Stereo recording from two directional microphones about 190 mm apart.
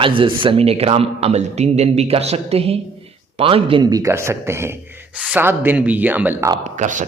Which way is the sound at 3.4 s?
30° right (ahead or behind).